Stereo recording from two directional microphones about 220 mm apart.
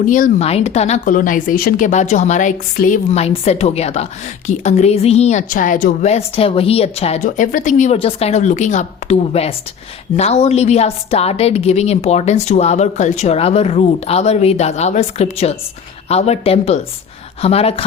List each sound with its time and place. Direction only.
0.0 s a woman's voice: 35° left (ahead or behind)